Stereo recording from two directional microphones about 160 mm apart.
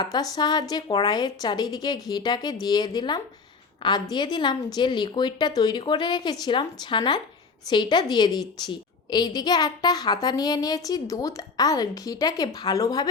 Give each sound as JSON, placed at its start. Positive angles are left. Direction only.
{"t": 0.0, "sound": "a woman's voice", "side_deg": 25}